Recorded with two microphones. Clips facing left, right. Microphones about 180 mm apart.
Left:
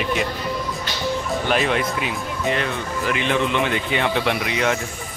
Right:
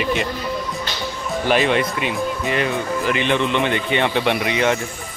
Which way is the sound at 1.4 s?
Centre (ahead or behind).